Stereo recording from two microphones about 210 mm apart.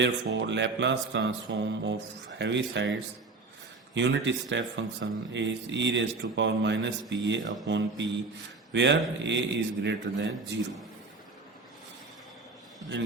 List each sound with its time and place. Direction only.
0.0 s speech: 55° right (ahead or behind)
3.9 s speech: 60° right (ahead or behind)